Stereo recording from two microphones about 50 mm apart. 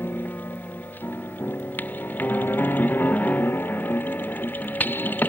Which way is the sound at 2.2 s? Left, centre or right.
Left.